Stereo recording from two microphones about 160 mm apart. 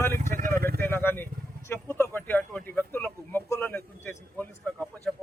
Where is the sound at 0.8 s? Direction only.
15° left (ahead or behind).